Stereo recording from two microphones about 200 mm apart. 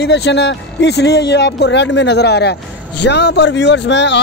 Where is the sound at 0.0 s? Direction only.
60° left (ahead or behind).